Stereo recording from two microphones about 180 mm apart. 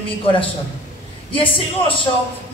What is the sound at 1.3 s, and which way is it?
Speech, 30° left (ahead or behind).